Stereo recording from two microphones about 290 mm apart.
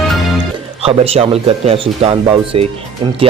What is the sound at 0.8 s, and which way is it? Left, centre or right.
A man's voice, centre.